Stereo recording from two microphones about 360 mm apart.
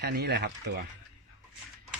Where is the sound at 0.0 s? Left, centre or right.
Right.